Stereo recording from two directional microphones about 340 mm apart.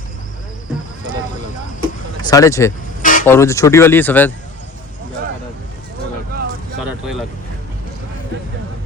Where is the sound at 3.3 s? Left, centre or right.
Centre.